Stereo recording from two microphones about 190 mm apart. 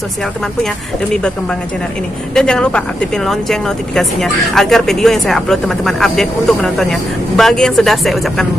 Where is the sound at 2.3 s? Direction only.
5° left (ahead or behind).